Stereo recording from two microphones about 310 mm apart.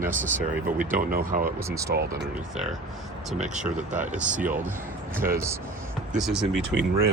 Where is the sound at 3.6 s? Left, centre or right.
Right.